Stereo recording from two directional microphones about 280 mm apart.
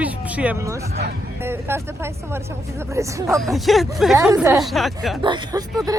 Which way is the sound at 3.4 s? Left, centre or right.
Centre.